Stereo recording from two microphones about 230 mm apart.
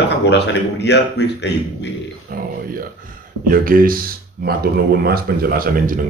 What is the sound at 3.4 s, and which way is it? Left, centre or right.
Speech, right.